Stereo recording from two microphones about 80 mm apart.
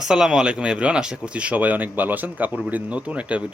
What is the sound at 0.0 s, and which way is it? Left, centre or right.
Speech, centre.